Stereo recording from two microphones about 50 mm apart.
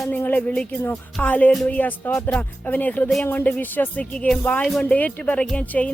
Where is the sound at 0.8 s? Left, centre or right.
Left.